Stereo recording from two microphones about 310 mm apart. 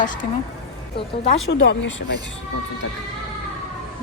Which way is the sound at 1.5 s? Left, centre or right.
Left.